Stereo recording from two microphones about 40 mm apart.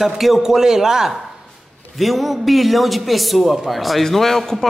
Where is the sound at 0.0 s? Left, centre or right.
Centre.